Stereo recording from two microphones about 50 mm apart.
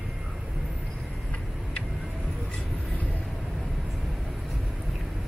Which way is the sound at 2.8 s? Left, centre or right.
Left.